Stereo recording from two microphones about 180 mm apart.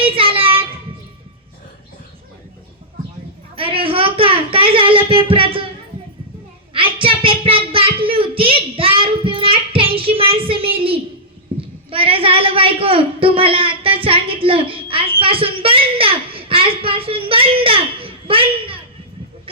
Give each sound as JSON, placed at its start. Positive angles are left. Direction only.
{"t": 0.0, "sound": "child singing", "side_deg": -30}
{"t": 3.5, "sound": "a sound", "side_deg": -30}
{"t": 6.7, "sound": "child singing", "side_deg": -30}
{"t": 11.9, "sound": "a woman's voice", "side_deg": -30}